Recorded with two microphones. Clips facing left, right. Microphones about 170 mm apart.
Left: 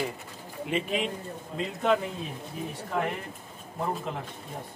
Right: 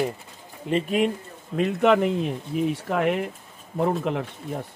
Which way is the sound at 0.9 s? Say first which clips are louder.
Right 7 dB; 60° right (ahead or behind).